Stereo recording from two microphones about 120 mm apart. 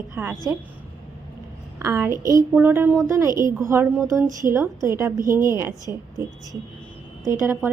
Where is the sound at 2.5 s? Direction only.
15° right (ahead or behind).